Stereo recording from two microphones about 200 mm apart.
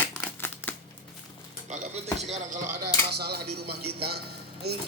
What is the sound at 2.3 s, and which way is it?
Speech, 40° right (ahead or behind).